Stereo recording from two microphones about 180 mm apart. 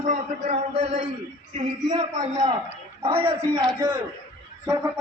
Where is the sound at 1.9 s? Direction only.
20° right (ahead or behind).